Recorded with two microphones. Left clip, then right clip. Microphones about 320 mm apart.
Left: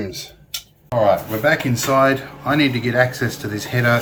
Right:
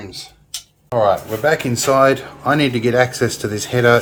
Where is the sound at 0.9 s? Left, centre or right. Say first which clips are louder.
Right 2 dB; centre.